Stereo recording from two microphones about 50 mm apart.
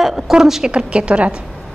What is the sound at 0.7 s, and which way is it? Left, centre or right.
Speech, right.